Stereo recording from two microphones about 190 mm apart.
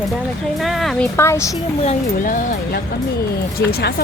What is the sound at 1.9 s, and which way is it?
Speech, 45° left (ahead or behind).